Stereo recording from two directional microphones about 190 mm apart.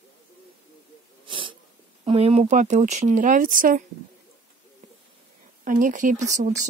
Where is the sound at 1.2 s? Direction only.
25° right (ahead or behind).